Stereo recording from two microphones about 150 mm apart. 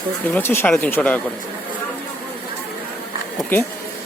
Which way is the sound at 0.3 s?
15° left (ahead or behind).